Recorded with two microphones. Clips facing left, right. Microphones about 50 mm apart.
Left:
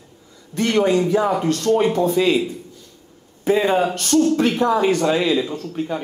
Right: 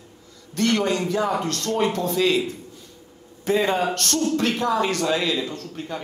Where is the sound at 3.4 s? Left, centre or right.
Centre.